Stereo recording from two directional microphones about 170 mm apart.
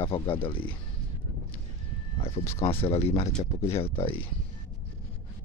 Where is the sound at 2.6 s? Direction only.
35° left (ahead or behind).